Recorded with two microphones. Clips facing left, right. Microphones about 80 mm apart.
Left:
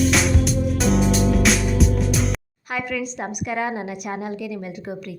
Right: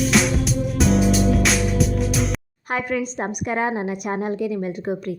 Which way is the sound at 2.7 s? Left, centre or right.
Right.